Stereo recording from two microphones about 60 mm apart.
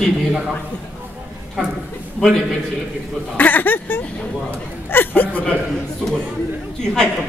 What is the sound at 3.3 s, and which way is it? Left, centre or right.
Speech, left.